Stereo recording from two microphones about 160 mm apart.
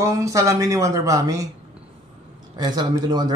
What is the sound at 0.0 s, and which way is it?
Speech, 20° right (ahead or behind).